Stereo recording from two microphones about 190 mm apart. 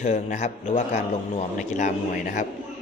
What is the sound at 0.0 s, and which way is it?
A man's voice, 35° left (ahead or behind).